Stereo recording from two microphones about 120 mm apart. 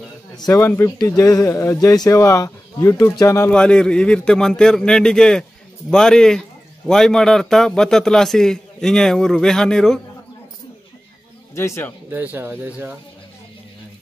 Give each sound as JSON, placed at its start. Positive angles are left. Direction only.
{"t": 0.4, "sound": "a man's voice", "side_deg": 25}
{"t": 3.4, "sound": "a man's voice", "side_deg": 10}
{"t": 11.5, "sound": "a man's voice", "side_deg": 20}
{"t": 12.1, "sound": "speech", "side_deg": -15}